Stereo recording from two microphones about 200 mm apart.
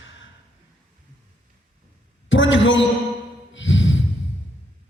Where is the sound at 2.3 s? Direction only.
70° left (ahead or behind).